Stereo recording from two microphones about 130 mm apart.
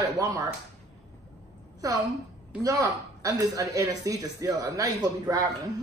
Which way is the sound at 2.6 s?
25° right (ahead or behind).